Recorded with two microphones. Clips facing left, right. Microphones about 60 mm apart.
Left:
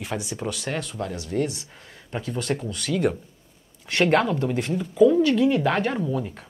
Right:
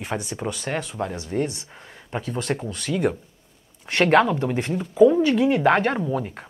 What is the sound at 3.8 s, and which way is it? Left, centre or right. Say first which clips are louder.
Speech: right 3 dB; right.